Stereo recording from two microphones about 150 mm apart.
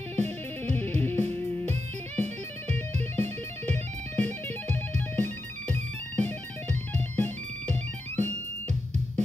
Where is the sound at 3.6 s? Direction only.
10° left (ahead or behind).